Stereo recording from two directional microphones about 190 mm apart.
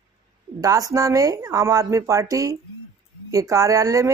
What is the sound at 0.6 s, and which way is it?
Speech, 20° right (ahead or behind).